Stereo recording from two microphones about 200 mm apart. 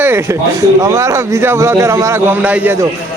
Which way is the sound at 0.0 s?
10° right (ahead or behind).